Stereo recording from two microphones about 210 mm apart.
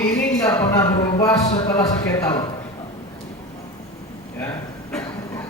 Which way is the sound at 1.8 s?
20° left (ahead or behind).